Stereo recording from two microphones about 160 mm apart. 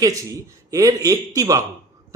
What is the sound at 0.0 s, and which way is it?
Speech, 20° right (ahead or behind).